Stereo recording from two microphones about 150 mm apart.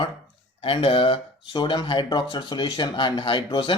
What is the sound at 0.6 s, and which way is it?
Speech, 35° left (ahead or behind).